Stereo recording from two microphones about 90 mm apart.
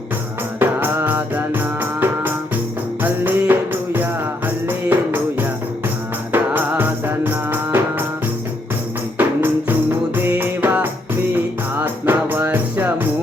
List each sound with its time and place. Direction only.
0.6 s music: 25° right (ahead or behind)
9.1 s music: 20° right (ahead or behind)